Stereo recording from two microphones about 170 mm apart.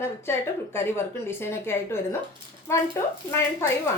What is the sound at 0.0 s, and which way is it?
A woman's voice, 15° left (ahead or behind).